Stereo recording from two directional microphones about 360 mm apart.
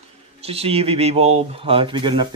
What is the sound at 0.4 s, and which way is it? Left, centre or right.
Speech, centre.